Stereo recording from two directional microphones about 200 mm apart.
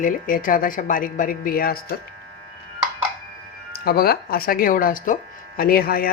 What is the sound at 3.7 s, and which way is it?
Speech, 50° left (ahead or behind).